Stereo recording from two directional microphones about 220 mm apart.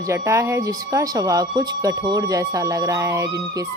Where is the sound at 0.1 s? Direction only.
15° right (ahead or behind).